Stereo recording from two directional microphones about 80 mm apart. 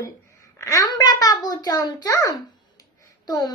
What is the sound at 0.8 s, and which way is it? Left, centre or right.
A child's voice, left.